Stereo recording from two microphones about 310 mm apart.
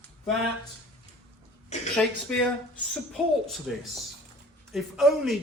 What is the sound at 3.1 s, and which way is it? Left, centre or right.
Speech, centre.